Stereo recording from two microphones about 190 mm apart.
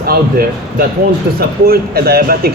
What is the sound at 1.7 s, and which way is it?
Speech, 55° right (ahead or behind).